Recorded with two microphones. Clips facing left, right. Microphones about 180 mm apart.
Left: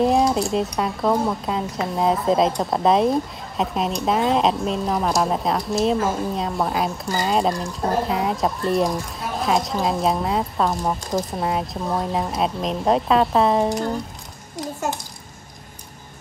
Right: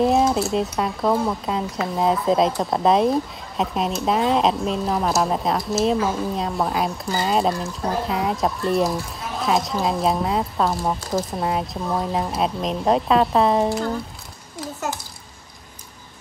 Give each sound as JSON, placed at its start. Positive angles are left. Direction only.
{"t": 0.0, "sound": "speech", "side_deg": 0}
{"t": 14.6, "sound": "a child's voice", "side_deg": 20}